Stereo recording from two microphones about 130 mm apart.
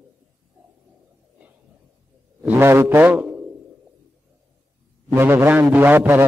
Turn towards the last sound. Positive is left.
turn(degrees=-15)  # may be behind; listen again after turning